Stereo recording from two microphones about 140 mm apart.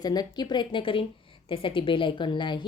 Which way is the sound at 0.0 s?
30° left (ahead or behind).